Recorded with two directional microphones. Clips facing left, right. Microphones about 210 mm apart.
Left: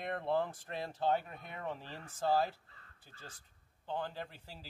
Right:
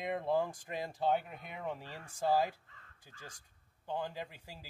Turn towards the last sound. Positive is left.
turn(degrees=-15)  # may be behind; listen again after turning